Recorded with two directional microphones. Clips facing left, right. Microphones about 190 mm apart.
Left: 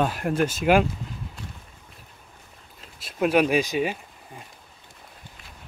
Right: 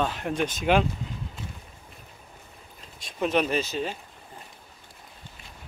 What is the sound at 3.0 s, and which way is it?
Speech, 5° left (ahead or behind).